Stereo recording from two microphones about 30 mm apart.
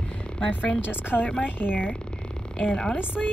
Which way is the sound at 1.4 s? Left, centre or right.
Left.